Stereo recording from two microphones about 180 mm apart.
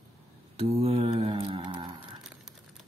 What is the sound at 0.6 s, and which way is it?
Mantra, 35° right (ahead or behind).